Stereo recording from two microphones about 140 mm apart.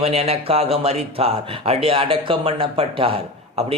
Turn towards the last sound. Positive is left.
turn(degrees=-40)  # may be behind; listen again after turning